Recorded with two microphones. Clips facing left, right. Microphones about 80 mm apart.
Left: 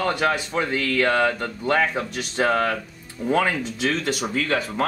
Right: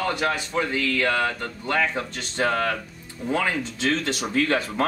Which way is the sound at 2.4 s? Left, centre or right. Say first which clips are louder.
Left 2 dB; left.